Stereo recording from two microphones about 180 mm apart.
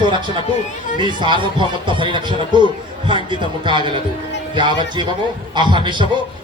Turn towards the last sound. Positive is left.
turn(degrees=-25)  # may be behind; listen again after turning